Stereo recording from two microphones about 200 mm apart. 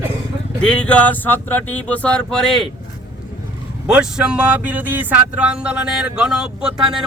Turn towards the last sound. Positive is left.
turn(degrees=-5)  # may be behind; listen again after turning